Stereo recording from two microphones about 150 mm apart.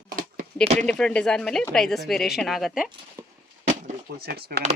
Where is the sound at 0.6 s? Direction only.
50° right (ahead or behind).